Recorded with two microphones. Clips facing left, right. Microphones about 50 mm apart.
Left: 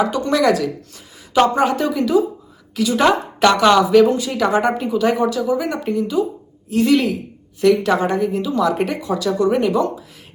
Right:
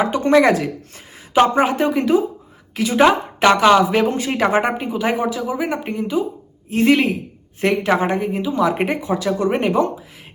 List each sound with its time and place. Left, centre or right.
0.0 s a woman's voice: right
3.8 s speech: right
4.4 s a woman's voice: right